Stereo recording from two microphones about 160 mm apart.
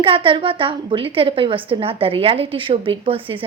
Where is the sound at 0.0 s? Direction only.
30° right (ahead or behind).